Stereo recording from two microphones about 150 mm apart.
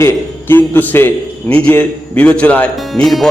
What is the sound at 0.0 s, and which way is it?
A man's voice, 15° left (ahead or behind).